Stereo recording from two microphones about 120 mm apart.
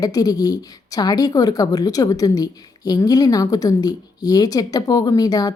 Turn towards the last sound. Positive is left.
turn(degrees=30)  # may be behind; listen again after turning